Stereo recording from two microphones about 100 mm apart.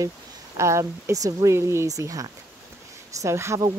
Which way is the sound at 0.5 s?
30° right (ahead or behind).